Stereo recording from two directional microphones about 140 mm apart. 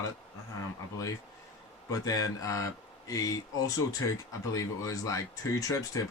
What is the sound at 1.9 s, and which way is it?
Speech, 25° left (ahead or behind).